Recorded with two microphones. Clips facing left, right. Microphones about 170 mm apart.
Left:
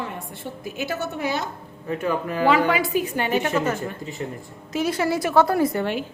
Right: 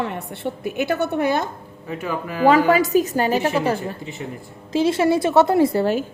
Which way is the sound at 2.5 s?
40° right (ahead or behind).